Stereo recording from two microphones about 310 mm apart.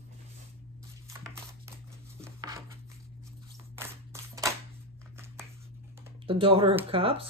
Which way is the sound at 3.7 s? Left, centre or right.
Centre.